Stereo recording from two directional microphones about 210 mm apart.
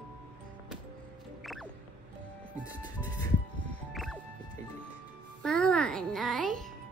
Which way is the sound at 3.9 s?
Centre (ahead or behind).